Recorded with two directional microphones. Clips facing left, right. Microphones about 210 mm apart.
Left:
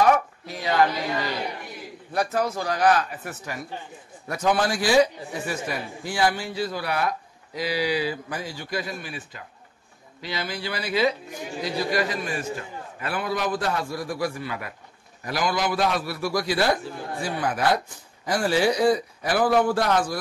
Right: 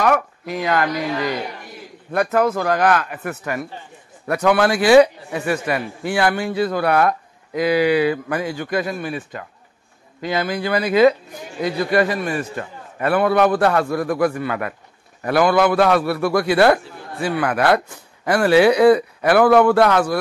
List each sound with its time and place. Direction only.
0.0 s speech: 65° right (ahead or behind)
2.1 s a man's voice: 55° right (ahead or behind)